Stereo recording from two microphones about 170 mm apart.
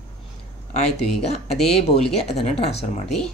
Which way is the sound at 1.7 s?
40° left (ahead or behind).